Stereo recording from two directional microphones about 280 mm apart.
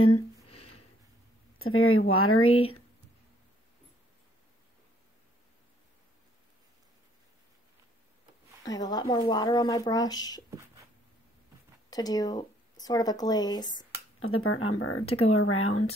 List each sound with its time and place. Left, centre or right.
0.0 s a sound: left
1.6 s speech: left
8.6 s speech: centre
11.9 s speech: centre
14.2 s speech: left